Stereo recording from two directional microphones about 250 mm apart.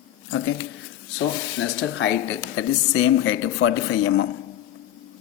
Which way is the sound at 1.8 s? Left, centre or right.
Left.